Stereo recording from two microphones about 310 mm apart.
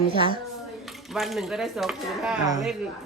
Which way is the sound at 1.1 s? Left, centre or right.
Centre.